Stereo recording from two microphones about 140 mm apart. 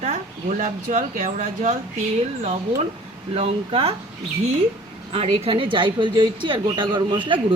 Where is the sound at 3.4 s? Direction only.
45° right (ahead or behind).